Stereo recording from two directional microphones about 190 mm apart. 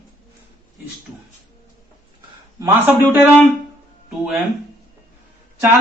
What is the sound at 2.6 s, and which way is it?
Speech, 10° right (ahead or behind).